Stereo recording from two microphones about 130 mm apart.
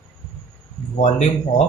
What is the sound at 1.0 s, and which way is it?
Speech, 60° left (ahead or behind).